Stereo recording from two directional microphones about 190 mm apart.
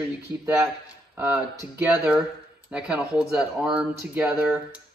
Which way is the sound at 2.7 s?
5° right (ahead or behind).